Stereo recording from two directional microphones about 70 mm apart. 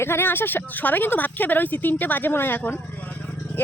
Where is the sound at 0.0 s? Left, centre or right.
Left.